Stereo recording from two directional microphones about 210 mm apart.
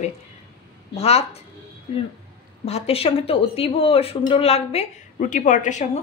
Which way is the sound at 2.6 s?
30° left (ahead or behind).